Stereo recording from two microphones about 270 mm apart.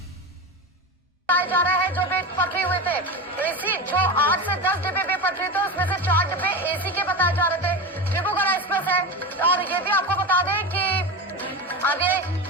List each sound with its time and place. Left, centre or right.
1.3 s music: centre
3.9 s speech: centre
6.7 s music: centre